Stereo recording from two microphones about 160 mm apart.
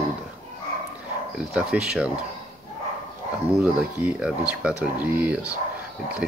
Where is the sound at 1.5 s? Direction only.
5° right (ahead or behind).